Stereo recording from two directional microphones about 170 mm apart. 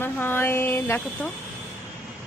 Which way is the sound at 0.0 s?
10° left (ahead or behind).